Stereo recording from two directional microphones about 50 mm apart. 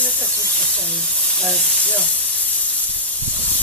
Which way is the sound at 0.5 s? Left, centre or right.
Left.